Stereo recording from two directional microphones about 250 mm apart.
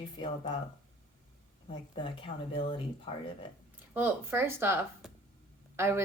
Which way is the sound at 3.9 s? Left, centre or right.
Centre.